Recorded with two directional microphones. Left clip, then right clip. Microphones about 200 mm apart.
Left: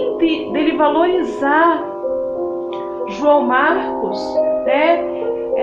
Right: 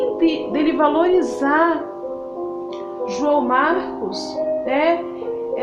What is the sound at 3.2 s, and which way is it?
Speech, 55° right (ahead or behind).